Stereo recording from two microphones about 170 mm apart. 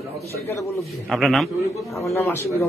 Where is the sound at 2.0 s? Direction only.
15° left (ahead or behind).